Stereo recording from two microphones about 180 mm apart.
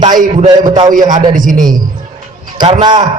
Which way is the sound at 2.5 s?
25° right (ahead or behind).